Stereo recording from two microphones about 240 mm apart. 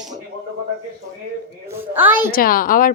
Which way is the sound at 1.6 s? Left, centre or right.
Centre.